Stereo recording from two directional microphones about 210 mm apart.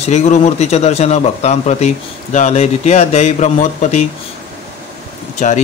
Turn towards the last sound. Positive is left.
turn(degrees=35)  # may be behind; listen again after turning